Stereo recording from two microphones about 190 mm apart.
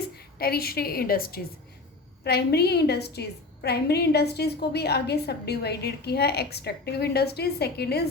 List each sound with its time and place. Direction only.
0.3 s a woman's voice: 55° left (ahead or behind)